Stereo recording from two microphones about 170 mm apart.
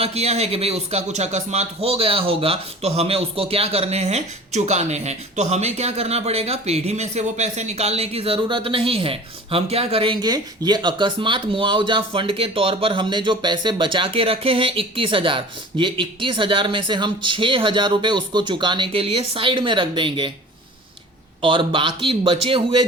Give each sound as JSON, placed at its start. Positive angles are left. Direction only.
{"t": 0.0, "sound": "speech", "side_deg": -35}
{"t": 21.4, "sound": "speech", "side_deg": -30}